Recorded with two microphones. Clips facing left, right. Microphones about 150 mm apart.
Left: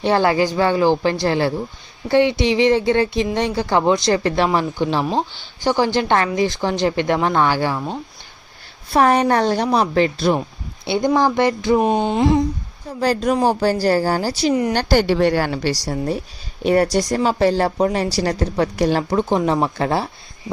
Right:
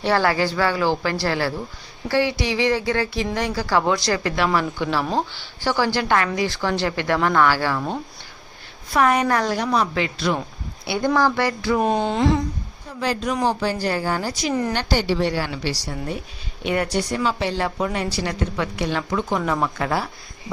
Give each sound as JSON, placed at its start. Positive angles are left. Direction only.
{"t": 0.0, "sound": "speech", "side_deg": 20}
{"t": 8.9, "sound": "speech", "side_deg": 30}
{"t": 10.8, "sound": "speech", "side_deg": 20}
{"t": 11.8, "sound": "a sound", "side_deg": 10}
{"t": 13.0, "sound": "a woman's voice", "side_deg": 40}